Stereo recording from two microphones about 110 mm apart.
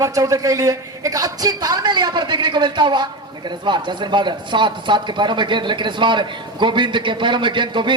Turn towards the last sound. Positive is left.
turn(degrees=-45)  # may be behind; listen again after turning